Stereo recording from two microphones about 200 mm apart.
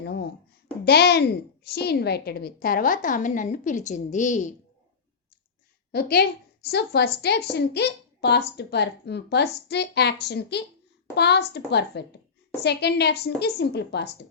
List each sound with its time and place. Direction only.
0.0 s a woman's voice: 55° left (ahead or behind); by 4.5 s 40° left (ahead or behind)
5.9 s a woman's voice: 50° left (ahead or behind)